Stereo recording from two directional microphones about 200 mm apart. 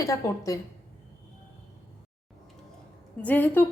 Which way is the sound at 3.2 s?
10° left (ahead or behind).